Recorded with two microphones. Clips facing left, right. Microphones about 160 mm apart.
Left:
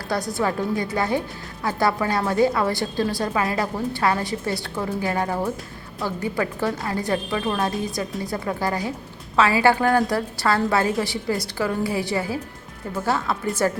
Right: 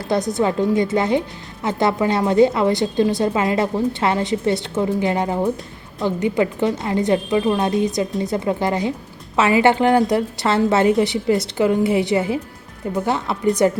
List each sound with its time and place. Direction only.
0.1 s a woman's voice: 20° right (ahead or behind)